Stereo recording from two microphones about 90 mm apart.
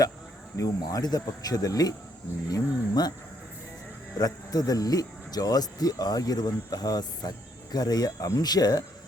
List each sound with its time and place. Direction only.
0.5 s speech: 40° left (ahead or behind)
4.2 s speech: 40° left (ahead or behind)